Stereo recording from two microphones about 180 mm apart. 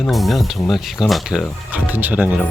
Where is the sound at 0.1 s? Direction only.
Centre (ahead or behind).